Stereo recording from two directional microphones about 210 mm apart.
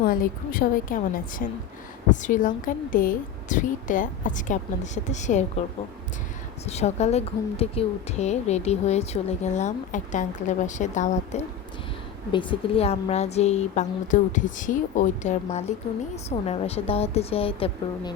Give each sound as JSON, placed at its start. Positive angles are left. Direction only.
{"t": 0.0, "sound": "a woman's voice", "side_deg": 45}
{"t": 6.7, "sound": "a woman's voice", "side_deg": 30}
{"t": 12.3, "sound": "a woman's voice", "side_deg": 25}